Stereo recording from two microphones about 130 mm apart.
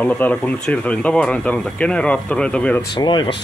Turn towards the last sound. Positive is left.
turn(degrees=35)  # may be behind; listen again after turning